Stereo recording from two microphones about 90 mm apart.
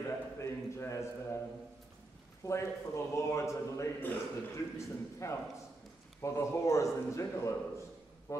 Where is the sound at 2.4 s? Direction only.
30° left (ahead or behind).